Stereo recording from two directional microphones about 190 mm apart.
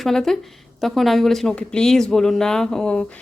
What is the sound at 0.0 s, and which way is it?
Speech, centre (ahead or behind).